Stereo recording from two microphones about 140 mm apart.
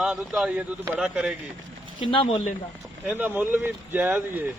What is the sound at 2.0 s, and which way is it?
Speech, 40° left (ahead or behind).